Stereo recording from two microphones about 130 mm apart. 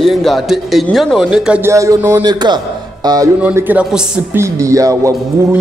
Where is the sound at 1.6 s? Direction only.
25° right (ahead or behind).